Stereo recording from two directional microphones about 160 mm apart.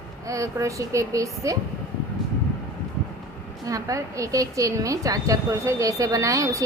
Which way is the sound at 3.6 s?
20° right (ahead or behind).